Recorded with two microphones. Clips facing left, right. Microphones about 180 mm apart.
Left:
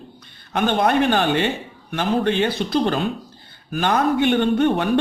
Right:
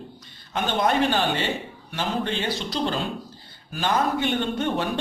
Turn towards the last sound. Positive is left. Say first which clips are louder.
# left 7 dB
turn(degrees=60)  # may be behind; listen again after turning